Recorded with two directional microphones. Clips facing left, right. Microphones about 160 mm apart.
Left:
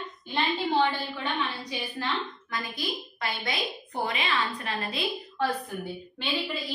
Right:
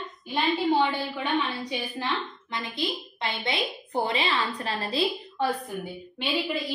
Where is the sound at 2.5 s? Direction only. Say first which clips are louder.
Right 3 dB; 25° right (ahead or behind).